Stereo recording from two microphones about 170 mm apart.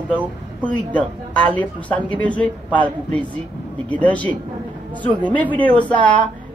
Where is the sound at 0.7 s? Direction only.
10° left (ahead or behind).